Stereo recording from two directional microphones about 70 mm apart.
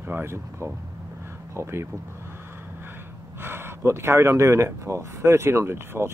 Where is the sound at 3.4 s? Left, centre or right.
Right.